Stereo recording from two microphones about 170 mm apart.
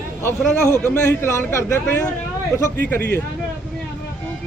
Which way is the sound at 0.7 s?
15° left (ahead or behind).